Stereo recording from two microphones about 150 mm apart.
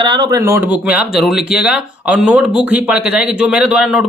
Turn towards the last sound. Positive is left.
turn(degrees=-5)  # may be behind; listen again after turning